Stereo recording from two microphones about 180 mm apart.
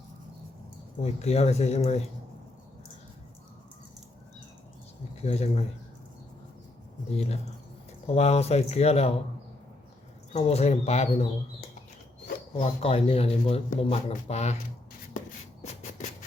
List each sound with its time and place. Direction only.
1.0 s speech: 35° left (ahead or behind)
5.2 s speech: 35° left (ahead or behind)
8.0 s speech: 35° left (ahead or behind)
10.3 s speech: 35° left (ahead or behind)
15.6 s a sound: 40° left (ahead or behind)